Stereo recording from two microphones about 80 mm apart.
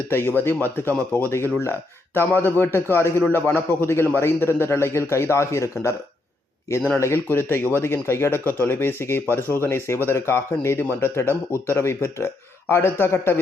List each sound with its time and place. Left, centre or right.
0.1 s speech: left
7.0 s speech: left